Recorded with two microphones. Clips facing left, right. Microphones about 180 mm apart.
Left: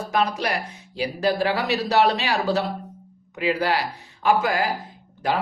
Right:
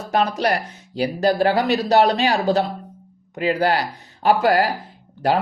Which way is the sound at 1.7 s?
35° right (ahead or behind).